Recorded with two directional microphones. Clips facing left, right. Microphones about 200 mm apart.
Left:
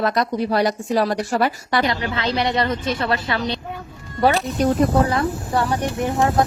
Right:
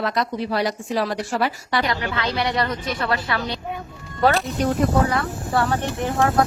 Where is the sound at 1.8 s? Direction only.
25° left (ahead or behind).